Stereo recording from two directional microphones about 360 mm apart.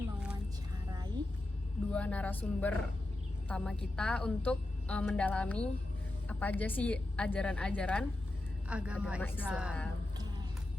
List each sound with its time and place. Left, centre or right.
1.9 s a woman's voice: centre